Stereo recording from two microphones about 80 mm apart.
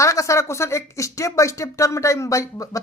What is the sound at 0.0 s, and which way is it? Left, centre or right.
Speech, left.